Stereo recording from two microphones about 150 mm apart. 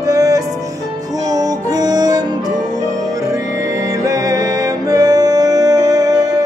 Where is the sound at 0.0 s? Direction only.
20° right (ahead or behind).